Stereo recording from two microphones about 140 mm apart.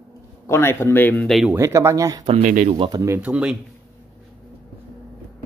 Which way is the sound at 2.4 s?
65° right (ahead or behind).